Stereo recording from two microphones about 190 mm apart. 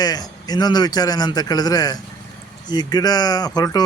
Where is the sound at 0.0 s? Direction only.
20° left (ahead or behind).